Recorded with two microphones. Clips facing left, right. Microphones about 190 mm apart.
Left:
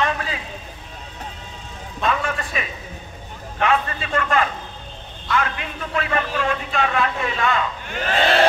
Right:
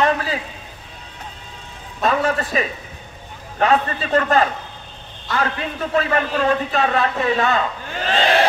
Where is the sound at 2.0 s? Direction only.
35° right (ahead or behind).